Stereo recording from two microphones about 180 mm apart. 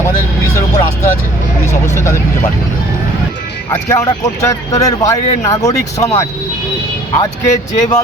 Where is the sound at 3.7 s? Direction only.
15° left (ahead or behind).